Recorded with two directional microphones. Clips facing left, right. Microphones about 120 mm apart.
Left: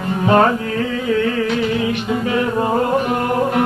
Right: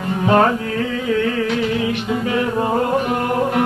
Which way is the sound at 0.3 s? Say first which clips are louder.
Left 1 dB; 35° left (ahead or behind).